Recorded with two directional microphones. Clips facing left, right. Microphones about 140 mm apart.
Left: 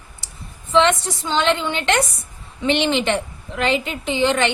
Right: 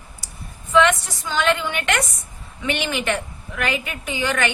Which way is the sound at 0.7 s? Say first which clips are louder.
Left 1 dB; 25° left (ahead or behind).